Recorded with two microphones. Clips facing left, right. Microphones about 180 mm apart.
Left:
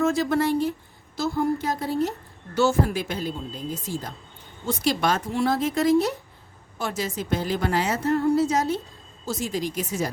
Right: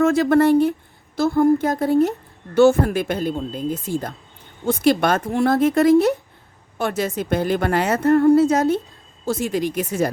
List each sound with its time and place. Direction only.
0.0 s a woman's voice: 60° right (ahead or behind)